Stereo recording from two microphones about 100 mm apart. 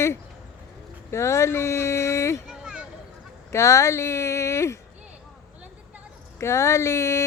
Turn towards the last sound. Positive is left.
turn(degrees=30)  # may be behind; listen again after turning